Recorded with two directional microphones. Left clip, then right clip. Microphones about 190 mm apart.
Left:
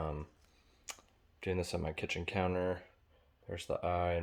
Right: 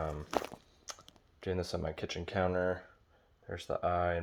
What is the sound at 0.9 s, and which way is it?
Computer keyboard, 5° left (ahead or behind).